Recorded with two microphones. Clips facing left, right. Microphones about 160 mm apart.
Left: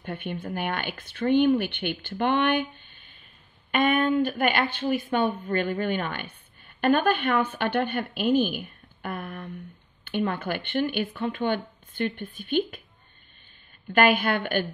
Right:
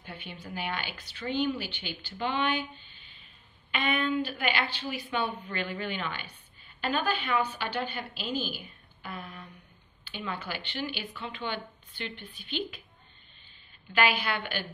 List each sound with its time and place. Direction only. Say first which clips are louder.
0.0 s a woman's voice: left 10 dB; 55° left (ahead or behind)
13.9 s a woman's voice: left 7 dB; 50° left (ahead or behind)